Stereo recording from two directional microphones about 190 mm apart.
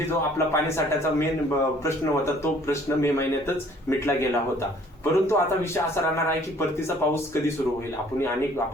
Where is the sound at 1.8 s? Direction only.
15° left (ahead or behind).